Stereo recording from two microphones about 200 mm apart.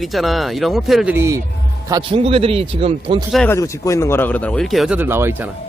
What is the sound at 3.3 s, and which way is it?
A man's voice, 5° left (ahead or behind).